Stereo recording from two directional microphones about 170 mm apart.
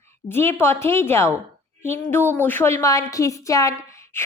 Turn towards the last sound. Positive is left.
turn(degrees=20)  # may be behind; listen again after turning